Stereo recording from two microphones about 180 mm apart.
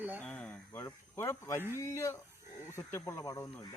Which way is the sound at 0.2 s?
5° left (ahead or behind).